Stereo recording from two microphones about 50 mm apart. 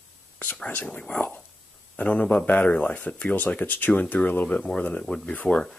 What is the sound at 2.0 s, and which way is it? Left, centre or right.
Speech, left.